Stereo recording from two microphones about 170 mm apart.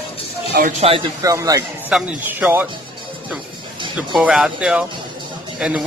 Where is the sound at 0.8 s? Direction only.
35° right (ahead or behind).